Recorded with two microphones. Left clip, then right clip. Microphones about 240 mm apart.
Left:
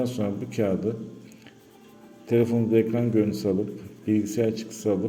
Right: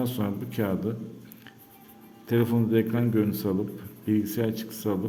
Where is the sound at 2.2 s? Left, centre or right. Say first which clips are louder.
Left 3 dB; centre.